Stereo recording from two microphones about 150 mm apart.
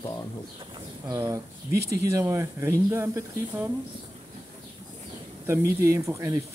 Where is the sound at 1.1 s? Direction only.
20° right (ahead or behind).